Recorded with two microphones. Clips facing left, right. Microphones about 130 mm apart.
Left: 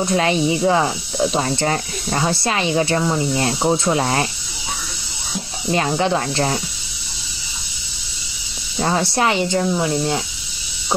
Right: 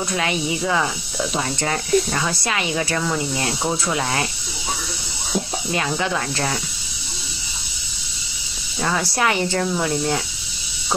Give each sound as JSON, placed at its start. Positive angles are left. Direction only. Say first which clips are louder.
{"t": 0.0, "sound": "speech", "louder": "left 6 dB", "side_deg": 35}
{"t": 5.7, "sound": "speech", "louder": "left 7 dB", "side_deg": 30}
{"t": 8.7, "sound": "speech", "louder": "left 3 dB", "side_deg": 35}